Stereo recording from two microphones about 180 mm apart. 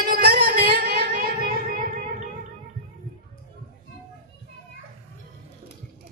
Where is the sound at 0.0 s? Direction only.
55° right (ahead or behind).